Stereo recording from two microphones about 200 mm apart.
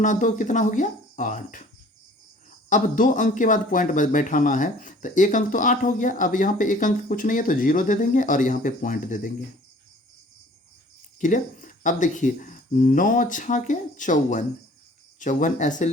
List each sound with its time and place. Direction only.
0.0 s speech: 40° left (ahead or behind)
2.6 s speech: 40° left (ahead or behind)
11.2 s speech: 40° left (ahead or behind)